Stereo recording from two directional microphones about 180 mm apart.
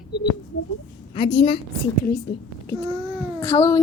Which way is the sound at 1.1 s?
30° left (ahead or behind).